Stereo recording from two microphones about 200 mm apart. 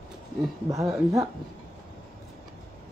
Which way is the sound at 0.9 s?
15° right (ahead or behind).